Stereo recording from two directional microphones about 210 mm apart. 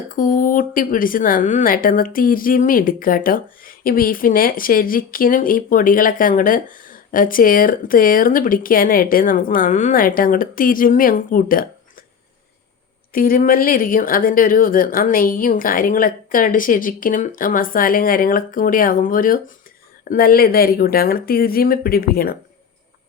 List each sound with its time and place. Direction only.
0.1 s speech: 40° left (ahead or behind)
13.1 s speech: 45° left (ahead or behind)